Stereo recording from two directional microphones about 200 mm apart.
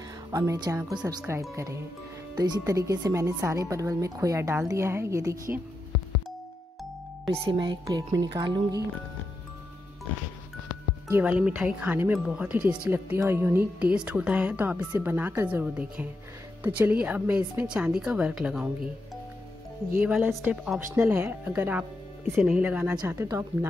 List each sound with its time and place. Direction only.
0.3 s speech: 20° right (ahead or behind)
7.4 s speech: 20° right (ahead or behind)
11.1 s a woman's voice: 10° right (ahead or behind)
20.1 s a woman's voice: 10° right (ahead or behind)